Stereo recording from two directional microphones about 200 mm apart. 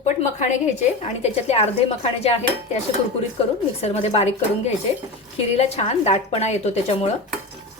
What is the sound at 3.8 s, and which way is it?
Speech, 30° left (ahead or behind).